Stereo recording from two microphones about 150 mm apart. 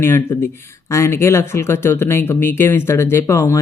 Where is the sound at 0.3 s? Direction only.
15° left (ahead or behind).